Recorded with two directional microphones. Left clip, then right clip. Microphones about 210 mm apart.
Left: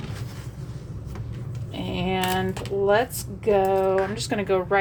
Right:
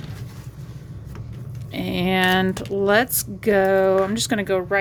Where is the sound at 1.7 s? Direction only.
35° right (ahead or behind).